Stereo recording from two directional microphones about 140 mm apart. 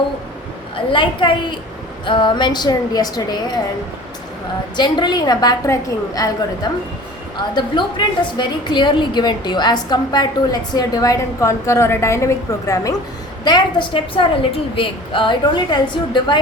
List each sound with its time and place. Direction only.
0.9 s a woman's voice: 35° left (ahead or behind)
4.8 s a woman's voice: 30° left (ahead or behind)
7.3 s a woman's voice: 35° left (ahead or behind)